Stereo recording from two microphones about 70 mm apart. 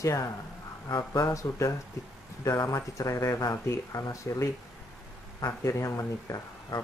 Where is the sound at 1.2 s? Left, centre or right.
Left.